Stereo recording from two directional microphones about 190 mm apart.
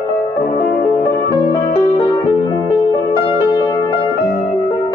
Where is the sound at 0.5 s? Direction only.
20° left (ahead or behind).